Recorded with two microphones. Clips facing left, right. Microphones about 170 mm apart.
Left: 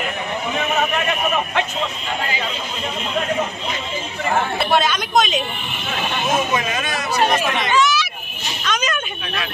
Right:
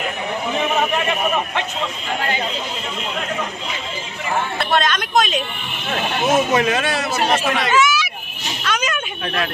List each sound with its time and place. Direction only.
4.6 s speech: 5° left (ahead or behind)
6.3 s speech: 70° right (ahead or behind)
7.7 s a sound: 10° right (ahead or behind)